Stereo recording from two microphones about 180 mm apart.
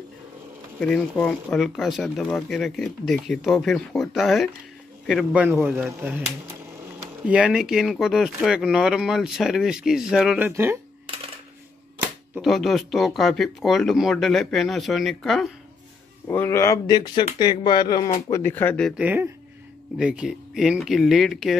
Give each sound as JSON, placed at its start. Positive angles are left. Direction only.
{"t": 0.7, "sound": "speech", "side_deg": 5}
{"t": 7.2, "sound": "speech", "side_deg": -5}
{"t": 10.5, "sound": "speech", "side_deg": -15}
{"t": 12.4, "sound": "speech", "side_deg": 0}
{"t": 16.3, "sound": "speech", "side_deg": 15}
{"t": 18.3, "sound": "speech", "side_deg": 10}
{"t": 18.9, "sound": "speech", "side_deg": -10}